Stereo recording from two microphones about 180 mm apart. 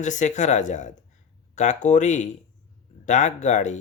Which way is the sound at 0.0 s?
40° left (ahead or behind).